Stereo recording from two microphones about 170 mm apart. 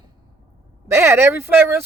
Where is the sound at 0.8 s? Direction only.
15° right (ahead or behind).